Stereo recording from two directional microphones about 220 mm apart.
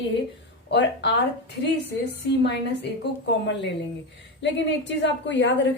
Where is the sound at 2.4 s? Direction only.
50° left (ahead or behind).